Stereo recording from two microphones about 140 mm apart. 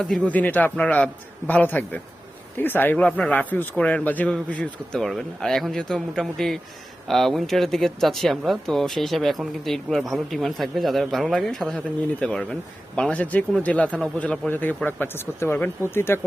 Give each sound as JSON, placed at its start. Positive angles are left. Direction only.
{"t": 0.0, "sound": "speech", "side_deg": 5}